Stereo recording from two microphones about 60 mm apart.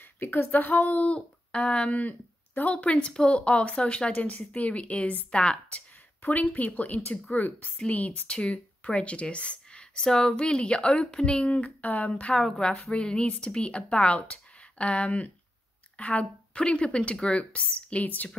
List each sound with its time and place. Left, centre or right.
0.0 s speech: left